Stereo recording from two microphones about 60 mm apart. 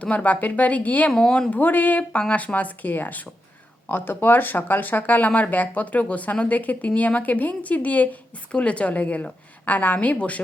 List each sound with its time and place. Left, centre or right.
0.0 s speech: left
1.1 s speech: centre
1.5 s speech: left